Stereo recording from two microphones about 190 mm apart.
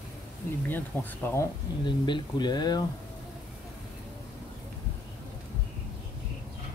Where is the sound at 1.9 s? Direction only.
25° left (ahead or behind).